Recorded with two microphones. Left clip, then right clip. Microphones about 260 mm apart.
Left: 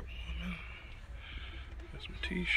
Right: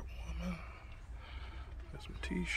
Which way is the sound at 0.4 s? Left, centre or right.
Centre.